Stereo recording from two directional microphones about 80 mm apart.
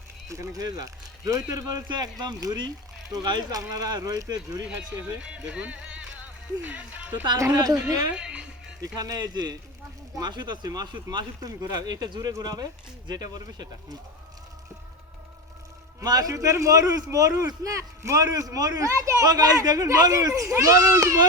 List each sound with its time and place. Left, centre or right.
0.3 s a man's voice: right
1.9 s a man's voice: right
5.2 s speech: centre
7.5 s a man's voice: right
8.1 s speech: centre
8.8 s speech: right
11.4 s a man's voice: right
16.0 s a man's voice: right